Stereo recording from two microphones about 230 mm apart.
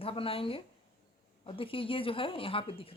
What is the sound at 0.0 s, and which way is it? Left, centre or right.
Speech, left.